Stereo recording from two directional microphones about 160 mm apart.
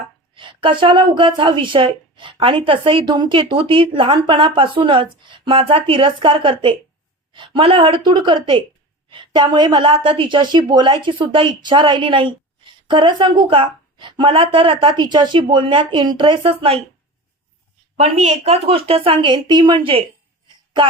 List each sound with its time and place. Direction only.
0.3 s a woman's voice: 30° right (ahead or behind)
17.9 s a woman's voice: 45° right (ahead or behind)